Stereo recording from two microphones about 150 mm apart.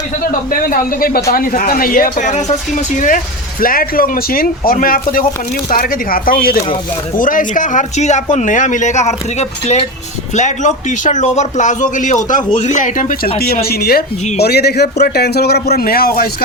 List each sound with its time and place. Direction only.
0.3 s speech: 75° left (ahead or behind)
3.6 s a man's voice: 75° left (ahead or behind)
13.2 s speech: 40° left (ahead or behind)
13.7 s speech: 90° left